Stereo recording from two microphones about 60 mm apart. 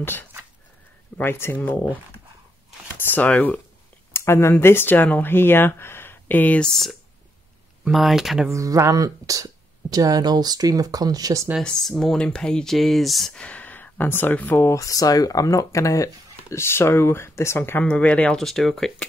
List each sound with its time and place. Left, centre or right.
0.0 s speech: left
3.1 s speech: left
4.1 s speech: left
6.6 s speech: centre
8.5 s speech: right
11.6 s speech: centre
12.7 s speech: centre
13.3 s speech: centre
14.6 s speech: left
17.8 s speech: centre
18.4 s speech: centre